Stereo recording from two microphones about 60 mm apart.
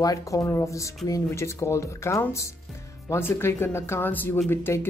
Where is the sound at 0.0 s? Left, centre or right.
Left.